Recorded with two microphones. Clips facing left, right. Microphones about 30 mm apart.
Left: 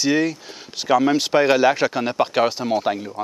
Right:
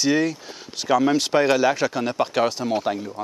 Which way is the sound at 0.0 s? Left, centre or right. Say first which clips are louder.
Left 1 dB; centre.